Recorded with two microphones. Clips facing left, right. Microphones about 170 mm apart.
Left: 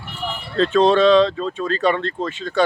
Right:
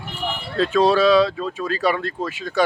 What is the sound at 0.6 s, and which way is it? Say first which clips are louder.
Speech: left 2 dB; 5° right (ahead or behind).